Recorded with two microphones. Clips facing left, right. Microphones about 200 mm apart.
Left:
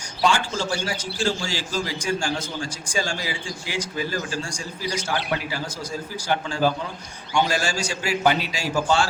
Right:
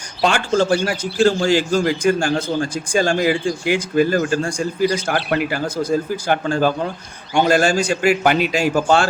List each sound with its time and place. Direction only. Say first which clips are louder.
0.2 s a man's voice: right 6 dB; 60° right (ahead or behind)